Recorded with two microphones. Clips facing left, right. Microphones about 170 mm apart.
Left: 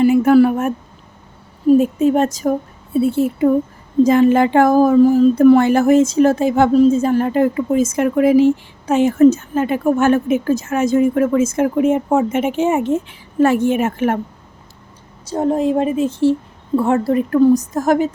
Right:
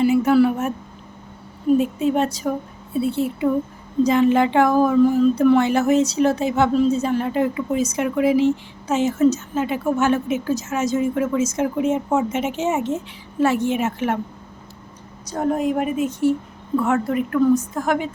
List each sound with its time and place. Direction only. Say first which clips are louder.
0.0 s a sound: left 5 dB; 50° left (ahead or behind)
1.8 s speech: left 5 dB; 45° left (ahead or behind)
15.2 s a woman's voice: left 4 dB; 25° left (ahead or behind); by 18.1 s 40° left (ahead or behind)